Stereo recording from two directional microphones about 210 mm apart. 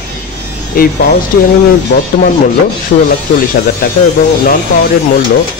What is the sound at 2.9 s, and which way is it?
A man's voice, 35° left (ahead or behind).